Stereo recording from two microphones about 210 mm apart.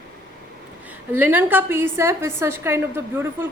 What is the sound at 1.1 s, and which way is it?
A woman's voice, 10° right (ahead or behind).